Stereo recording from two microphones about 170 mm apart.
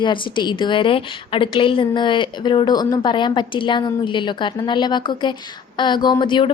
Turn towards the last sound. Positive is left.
turn(degrees=30)  # may be behind; listen again after turning